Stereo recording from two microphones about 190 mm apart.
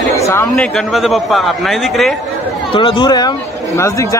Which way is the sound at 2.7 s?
25° left (ahead or behind).